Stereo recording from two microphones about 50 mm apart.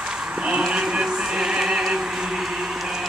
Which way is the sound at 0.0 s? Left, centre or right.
Centre.